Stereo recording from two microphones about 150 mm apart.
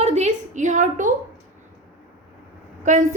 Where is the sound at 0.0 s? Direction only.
50° right (ahead or behind).